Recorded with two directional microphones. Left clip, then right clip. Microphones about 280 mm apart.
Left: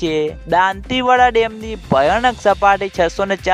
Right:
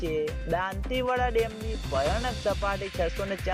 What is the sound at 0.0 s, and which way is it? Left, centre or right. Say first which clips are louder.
Speech: left 11 dB; left.